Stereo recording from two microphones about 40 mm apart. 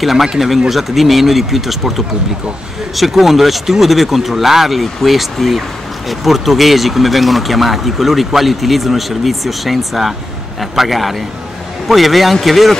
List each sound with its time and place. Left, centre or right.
0.0 s speech: centre